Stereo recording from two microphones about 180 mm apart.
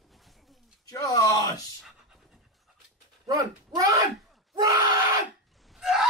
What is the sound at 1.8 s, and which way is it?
Pant, centre (ahead or behind).